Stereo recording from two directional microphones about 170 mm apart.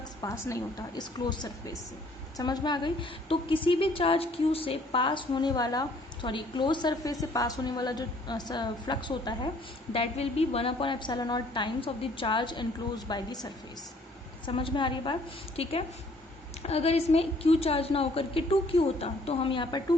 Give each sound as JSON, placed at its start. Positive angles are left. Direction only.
{"t": 0.2, "sound": "a woman's voice", "side_deg": 15}